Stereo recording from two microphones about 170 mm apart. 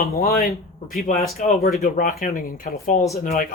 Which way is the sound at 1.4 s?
45° left (ahead or behind).